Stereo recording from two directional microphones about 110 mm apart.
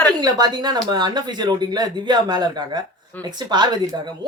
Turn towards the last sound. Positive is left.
turn(degrees=-40)  # may be behind; listen again after turning